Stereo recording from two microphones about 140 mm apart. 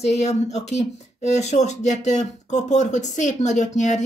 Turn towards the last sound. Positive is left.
turn(degrees=60)  # may be behind; listen again after turning